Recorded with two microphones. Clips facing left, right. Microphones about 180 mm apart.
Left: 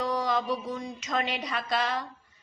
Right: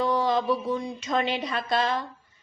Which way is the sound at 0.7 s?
30° right (ahead or behind).